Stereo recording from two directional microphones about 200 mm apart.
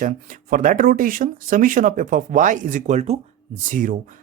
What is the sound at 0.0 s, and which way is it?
Speech, 40° right (ahead or behind).